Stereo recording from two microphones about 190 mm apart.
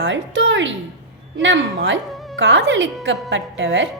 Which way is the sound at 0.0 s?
75° right (ahead or behind).